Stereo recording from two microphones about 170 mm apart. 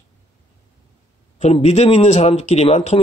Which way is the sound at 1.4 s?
40° left (ahead or behind).